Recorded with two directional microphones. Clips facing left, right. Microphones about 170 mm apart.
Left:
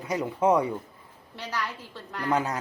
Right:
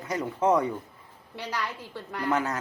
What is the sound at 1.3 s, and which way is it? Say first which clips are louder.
Speech: even; 15° right (ahead or behind).